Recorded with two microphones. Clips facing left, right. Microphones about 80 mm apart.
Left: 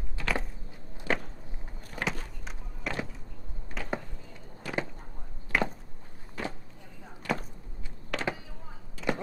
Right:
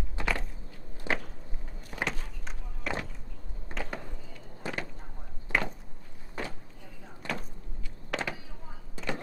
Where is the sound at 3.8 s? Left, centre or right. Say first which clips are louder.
Right 2 dB; centre.